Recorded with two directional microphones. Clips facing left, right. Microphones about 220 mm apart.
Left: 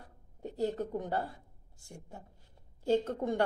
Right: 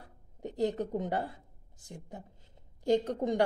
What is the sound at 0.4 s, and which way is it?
A woman's voice, 15° right (ahead or behind).